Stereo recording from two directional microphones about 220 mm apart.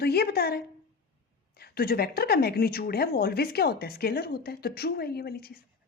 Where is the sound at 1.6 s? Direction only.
45° left (ahead or behind).